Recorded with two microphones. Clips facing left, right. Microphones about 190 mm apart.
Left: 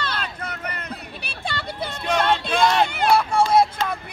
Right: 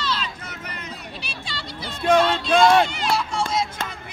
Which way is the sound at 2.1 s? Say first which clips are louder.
Right 3 dB; 55° left (ahead or behind).